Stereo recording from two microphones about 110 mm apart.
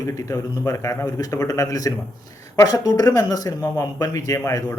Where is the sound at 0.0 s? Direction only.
30° left (ahead or behind).